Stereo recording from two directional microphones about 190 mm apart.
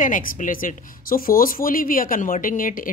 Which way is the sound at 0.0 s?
45° left (ahead or behind).